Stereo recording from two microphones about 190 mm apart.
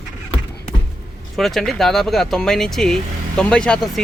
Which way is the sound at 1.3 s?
Centre (ahead or behind).